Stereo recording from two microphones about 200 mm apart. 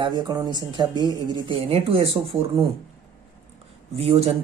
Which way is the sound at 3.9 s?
30° right (ahead or behind).